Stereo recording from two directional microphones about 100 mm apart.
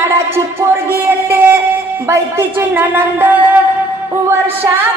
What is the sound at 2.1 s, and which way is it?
A woman's voice, 20° right (ahead or behind).